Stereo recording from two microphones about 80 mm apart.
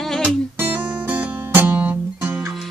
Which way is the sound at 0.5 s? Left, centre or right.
Right.